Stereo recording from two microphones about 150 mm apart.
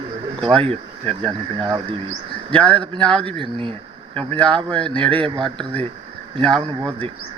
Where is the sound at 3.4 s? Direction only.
35° right (ahead or behind).